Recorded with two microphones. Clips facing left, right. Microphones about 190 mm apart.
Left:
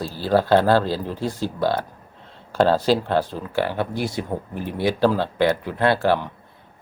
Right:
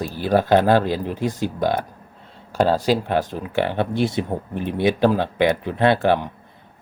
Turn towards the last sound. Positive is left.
turn(degrees=-20)  # may be behind; listen again after turning